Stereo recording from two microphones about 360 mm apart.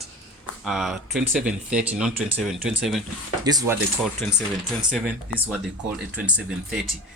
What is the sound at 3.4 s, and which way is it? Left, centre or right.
Speech, centre.